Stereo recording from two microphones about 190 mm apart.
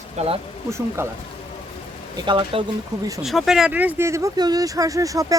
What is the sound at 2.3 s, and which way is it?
Speech, 25° right (ahead or behind).